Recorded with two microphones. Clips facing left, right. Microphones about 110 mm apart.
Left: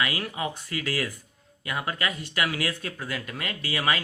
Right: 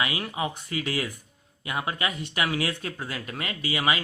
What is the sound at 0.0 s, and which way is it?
Speech, 20° right (ahead or behind).